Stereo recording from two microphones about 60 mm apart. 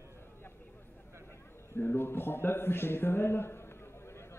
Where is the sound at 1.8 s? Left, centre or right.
Left.